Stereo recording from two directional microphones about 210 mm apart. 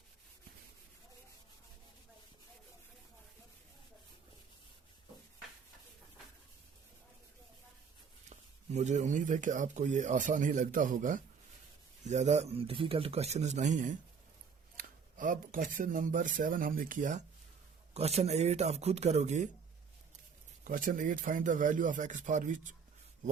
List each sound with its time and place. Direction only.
8.3 s speech: 35° right (ahead or behind)
20.7 s speech: 40° right (ahead or behind)